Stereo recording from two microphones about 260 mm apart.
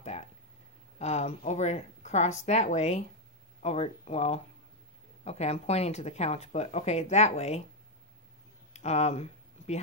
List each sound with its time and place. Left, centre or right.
0.9 s speech: left
8.7 s speech: left